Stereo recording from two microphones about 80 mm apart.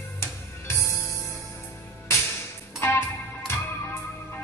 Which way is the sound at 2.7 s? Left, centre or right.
Left.